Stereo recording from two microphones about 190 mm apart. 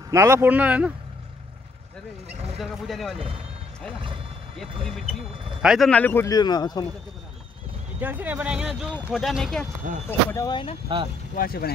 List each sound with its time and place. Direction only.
0.1 s speech: 15° right (ahead or behind)
2.5 s speech: centre (ahead or behind)
4.8 s speech: centre (ahead or behind); by 6.9 s 20° left (ahead or behind)
8.0 s speech: 10° right (ahead or behind)
10.0 s speech: 20° left (ahead or behind)
11.3 s speech: 50° left (ahead or behind)